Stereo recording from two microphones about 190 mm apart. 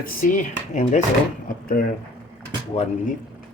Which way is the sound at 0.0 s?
45° left (ahead or behind).